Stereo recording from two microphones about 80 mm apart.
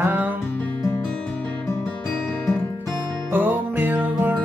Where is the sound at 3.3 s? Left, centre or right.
Right.